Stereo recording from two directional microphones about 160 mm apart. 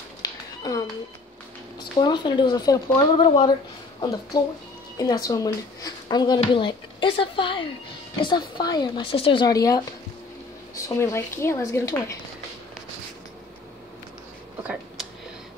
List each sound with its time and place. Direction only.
0.2 s a sound: 25° left (ahead or behind)
2.0 s speech: 25° left (ahead or behind)
4.9 s a woman's voice: 25° left (ahead or behind)